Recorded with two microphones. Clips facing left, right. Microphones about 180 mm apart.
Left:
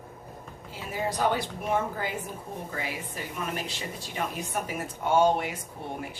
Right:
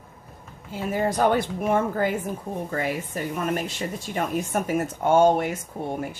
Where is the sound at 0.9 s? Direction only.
50° right (ahead or behind).